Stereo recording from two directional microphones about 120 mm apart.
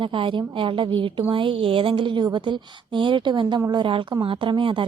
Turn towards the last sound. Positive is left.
turn(degrees=-45)  # may be behind; listen again after turning